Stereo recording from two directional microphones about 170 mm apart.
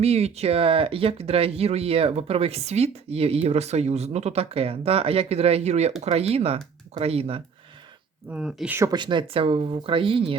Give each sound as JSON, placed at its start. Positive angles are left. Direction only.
{"t": 0.0, "sound": "speech", "side_deg": -40}
{"t": 8.3, "sound": "speech", "side_deg": -5}
{"t": 8.9, "sound": "speech", "side_deg": -30}